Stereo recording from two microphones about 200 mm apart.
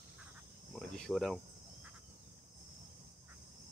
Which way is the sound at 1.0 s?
Centre (ahead or behind).